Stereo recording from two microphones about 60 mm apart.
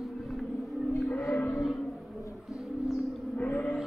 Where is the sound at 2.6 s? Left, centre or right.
Centre.